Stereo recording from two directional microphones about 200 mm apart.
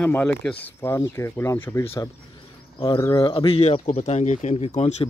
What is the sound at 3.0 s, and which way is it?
Speech, 20° left (ahead or behind).